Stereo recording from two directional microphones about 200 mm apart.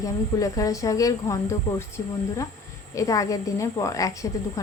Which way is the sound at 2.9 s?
15° left (ahead or behind).